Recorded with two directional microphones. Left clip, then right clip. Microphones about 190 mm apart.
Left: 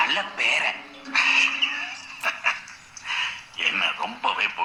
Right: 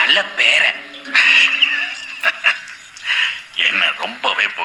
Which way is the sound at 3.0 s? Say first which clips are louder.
Right 10 dB; 45° right (ahead or behind).